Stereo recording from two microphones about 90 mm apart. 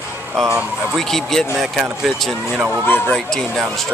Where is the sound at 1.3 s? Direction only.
Centre (ahead or behind).